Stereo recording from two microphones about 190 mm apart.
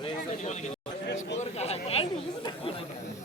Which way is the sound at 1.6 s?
30° left (ahead or behind).